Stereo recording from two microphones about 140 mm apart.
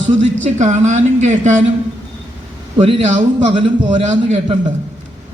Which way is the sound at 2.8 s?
50° right (ahead or behind).